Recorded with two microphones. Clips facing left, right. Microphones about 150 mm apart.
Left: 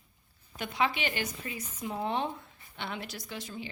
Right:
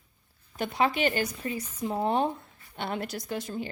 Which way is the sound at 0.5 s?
40° right (ahead or behind).